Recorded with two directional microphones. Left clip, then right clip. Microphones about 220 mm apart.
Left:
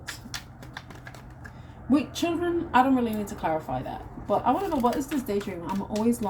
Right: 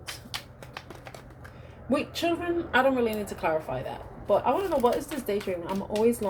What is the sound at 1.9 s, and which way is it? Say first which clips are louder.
Speech: left 1 dB; 30° right (ahead or behind).